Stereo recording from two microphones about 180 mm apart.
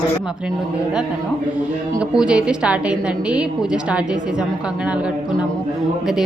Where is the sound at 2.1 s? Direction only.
5° right (ahead or behind).